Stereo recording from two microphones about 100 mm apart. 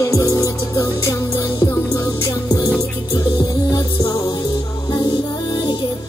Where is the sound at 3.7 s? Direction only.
35° left (ahead or behind).